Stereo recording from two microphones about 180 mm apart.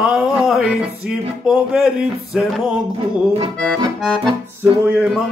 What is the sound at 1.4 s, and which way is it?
Music, 5° right (ahead or behind).